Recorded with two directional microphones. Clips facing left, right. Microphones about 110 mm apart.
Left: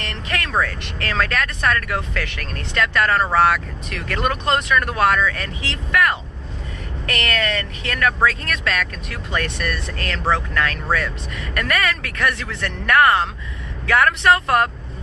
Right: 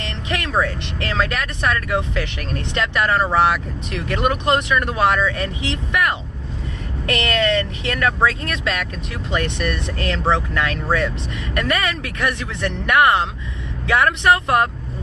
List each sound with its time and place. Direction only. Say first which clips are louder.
0.0 s speech: right 1 dB; 20° right (ahead or behind)